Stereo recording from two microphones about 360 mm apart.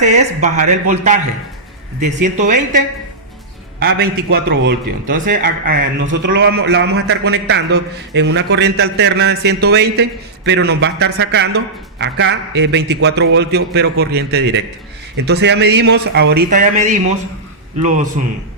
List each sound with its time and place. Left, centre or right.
0.0 s a man's voice: centre
3.8 s a man's voice: right